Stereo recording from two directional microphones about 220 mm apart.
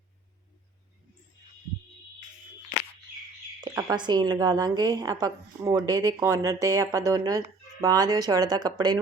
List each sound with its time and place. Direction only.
3.6 s speech: 15° right (ahead or behind)